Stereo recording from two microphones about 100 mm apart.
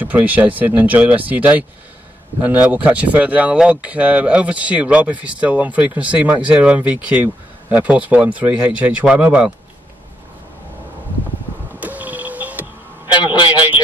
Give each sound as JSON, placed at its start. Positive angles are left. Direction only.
{"t": 0.0, "sound": "speech", "side_deg": -15}
{"t": 11.8, "sound": "music", "side_deg": -15}
{"t": 13.0, "sound": "a sound", "side_deg": 50}